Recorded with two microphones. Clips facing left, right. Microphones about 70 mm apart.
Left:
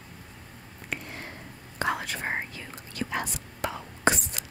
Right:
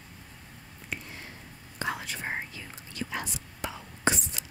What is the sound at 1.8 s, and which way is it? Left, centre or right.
Whispering, left.